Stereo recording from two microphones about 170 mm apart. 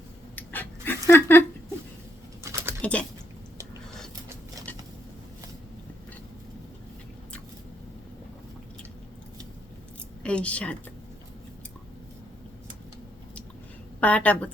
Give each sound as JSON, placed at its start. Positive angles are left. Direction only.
{"t": 0.3, "sound": "dog", "side_deg": 10}
{"t": 2.4, "sound": "bird", "side_deg": -15}
{"t": 2.8, "sound": "a woman's voice", "side_deg": 5}
{"t": 10.2, "sound": "a woman's voice", "side_deg": 5}
{"t": 14.0, "sound": "a woman's voice", "side_deg": 10}